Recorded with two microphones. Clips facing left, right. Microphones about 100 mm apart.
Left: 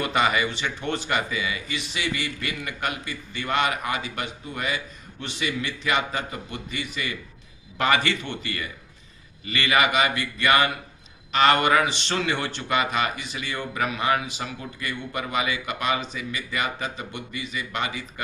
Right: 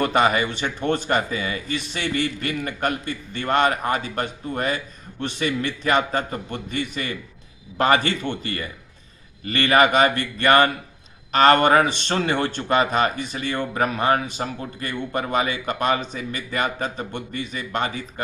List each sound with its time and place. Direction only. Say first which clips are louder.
0.0 s a man's voice: right 4 dB; 40° right (ahead or behind)